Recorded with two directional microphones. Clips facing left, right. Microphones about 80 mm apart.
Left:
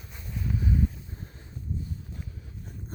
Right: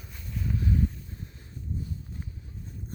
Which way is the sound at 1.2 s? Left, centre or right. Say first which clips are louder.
Even; left.